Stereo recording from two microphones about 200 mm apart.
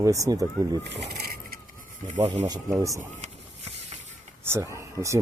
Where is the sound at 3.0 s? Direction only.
35° right (ahead or behind).